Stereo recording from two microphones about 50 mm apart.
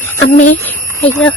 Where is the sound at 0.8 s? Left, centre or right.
Left.